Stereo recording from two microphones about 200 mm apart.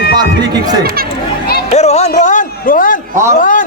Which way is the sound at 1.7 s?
35° left (ahead or behind).